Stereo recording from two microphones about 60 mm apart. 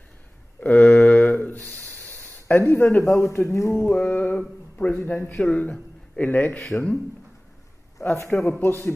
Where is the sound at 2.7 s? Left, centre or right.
Left.